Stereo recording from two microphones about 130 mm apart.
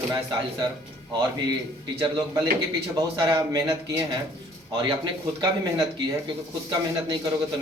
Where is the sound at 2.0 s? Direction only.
25° right (ahead or behind).